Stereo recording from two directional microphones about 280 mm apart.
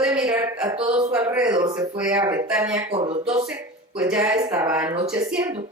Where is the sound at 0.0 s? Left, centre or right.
Centre.